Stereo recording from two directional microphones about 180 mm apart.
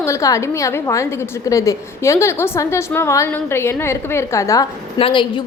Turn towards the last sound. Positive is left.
turn(degrees=25)  # may be behind; listen again after turning